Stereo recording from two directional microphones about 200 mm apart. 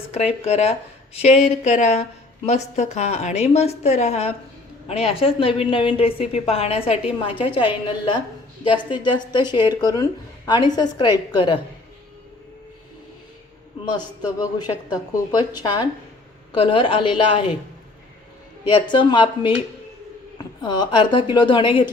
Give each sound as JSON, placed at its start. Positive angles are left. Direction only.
{"t": 0.1, "sound": "a woman's voice", "side_deg": 30}
{"t": 13.9, "sound": "a woman's voice", "side_deg": 20}
{"t": 18.7, "sound": "a woman's voice", "side_deg": 25}